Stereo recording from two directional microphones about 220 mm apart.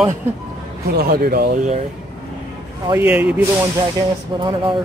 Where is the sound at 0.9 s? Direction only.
45° right (ahead or behind).